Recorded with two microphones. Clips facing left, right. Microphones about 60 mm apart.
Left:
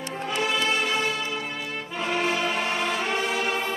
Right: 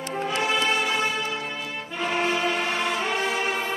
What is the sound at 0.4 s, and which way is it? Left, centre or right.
Music, right.